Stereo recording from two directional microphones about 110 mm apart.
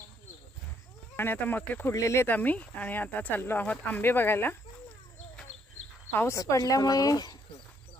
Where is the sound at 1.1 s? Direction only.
20° left (ahead or behind).